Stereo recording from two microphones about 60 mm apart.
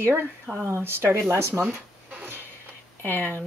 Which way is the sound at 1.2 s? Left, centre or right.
Right.